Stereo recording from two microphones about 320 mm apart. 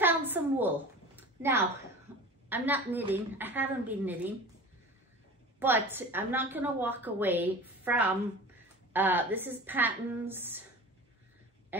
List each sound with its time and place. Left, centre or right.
0.0 s a sound: centre
2.5 s a woman's voice: centre
5.6 s a woman's voice: centre